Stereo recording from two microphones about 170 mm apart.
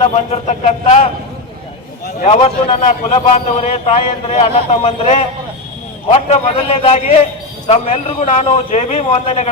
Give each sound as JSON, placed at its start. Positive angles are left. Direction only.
{"t": 0.0, "sound": "a man's voice", "side_deg": 40}
{"t": 2.2, "sound": "a man's voice", "side_deg": 40}